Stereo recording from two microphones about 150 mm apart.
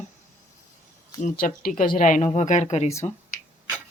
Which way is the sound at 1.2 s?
65° left (ahead or behind).